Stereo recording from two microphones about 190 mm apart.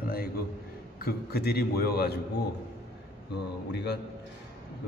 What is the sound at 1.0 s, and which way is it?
A man's voice, 55° left (ahead or behind).